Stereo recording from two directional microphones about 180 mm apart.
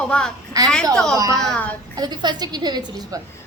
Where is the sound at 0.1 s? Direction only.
5° left (ahead or behind).